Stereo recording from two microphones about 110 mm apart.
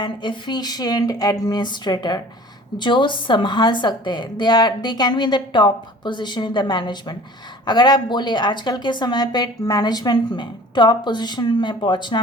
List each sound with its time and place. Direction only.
0.0 s a woman's voice: 45° left (ahead or behind)